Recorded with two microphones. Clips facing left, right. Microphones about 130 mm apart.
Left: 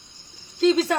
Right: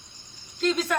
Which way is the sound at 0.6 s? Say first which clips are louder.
Left 6 dB; 30° left (ahead or behind).